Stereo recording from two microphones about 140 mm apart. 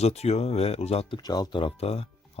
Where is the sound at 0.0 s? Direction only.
50° left (ahead or behind).